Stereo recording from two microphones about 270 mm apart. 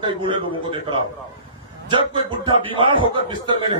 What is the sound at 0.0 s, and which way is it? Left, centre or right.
A man's voice, centre.